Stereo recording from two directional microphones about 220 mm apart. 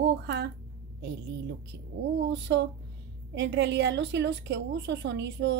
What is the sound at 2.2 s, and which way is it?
A woman's voice, 55° right (ahead or behind).